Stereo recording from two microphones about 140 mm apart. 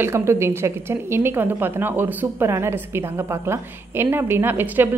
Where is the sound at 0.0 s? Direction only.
20° right (ahead or behind).